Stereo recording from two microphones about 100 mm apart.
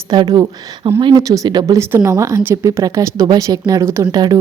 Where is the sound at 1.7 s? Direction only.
30° right (ahead or behind).